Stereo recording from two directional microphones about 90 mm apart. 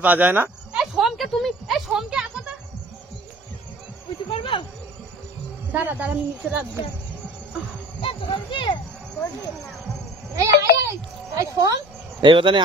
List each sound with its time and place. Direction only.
0.0 s a woman's voice: 20° right (ahead or behind)
0.7 s a sound: centre (ahead or behind)
4.3 s snake: 75° left (ahead or behind)
5.7 s a woman's voice: 20° right (ahead or behind)
8.0 s speech: 85° left; by 8.7 s 65° left (ahead or behind)
10.3 s a child's voice: 35° right (ahead or behind)
12.2 s speech: 70° right (ahead or behind)